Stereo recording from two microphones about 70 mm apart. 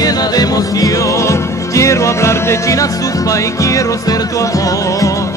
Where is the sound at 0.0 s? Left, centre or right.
Left.